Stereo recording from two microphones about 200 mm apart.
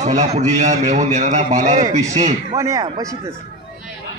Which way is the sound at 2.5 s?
15° right (ahead or behind).